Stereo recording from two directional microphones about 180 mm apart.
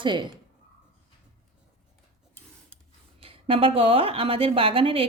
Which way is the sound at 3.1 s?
30° right (ahead or behind).